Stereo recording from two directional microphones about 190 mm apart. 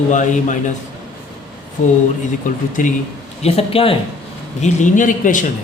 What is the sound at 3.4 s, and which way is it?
Speech, 30° left (ahead or behind).